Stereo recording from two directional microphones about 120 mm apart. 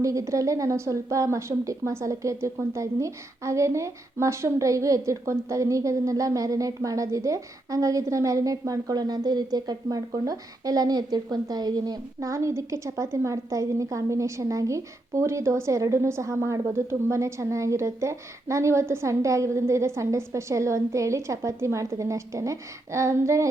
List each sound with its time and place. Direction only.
0.0 s a woman's voice: 25° right (ahead or behind)